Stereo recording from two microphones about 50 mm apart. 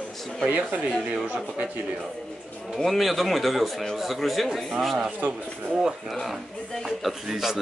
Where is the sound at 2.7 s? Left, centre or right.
Centre.